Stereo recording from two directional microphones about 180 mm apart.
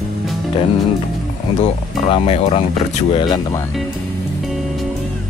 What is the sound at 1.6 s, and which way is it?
Speech, 35° left (ahead or behind).